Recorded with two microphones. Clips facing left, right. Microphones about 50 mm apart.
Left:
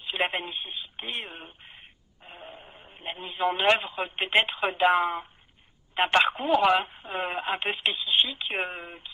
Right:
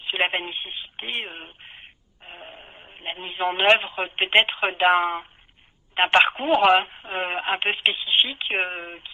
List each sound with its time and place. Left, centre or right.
0.0 s radio: right
3.5 s speech: right
5.9 s speech: right